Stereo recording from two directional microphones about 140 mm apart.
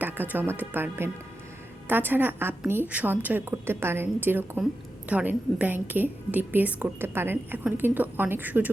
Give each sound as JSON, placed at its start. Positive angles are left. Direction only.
{"t": 0.0, "sound": "a woman's voice", "side_deg": -15}